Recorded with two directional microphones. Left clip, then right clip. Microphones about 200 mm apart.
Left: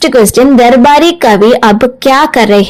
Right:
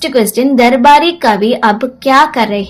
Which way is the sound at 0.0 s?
40° left (ahead or behind).